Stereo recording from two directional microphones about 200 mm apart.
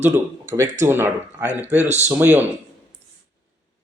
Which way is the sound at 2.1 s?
10° right (ahead or behind).